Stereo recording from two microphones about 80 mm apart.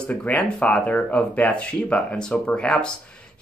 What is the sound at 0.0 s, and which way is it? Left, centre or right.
Speech, centre.